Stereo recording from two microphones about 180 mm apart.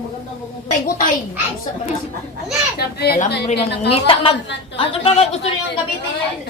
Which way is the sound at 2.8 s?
60° left (ahead or behind).